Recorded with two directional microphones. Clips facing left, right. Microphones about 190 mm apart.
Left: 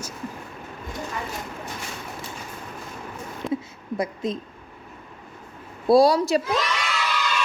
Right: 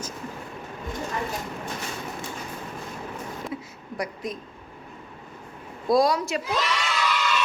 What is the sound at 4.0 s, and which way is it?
Speech, 25° left (ahead or behind).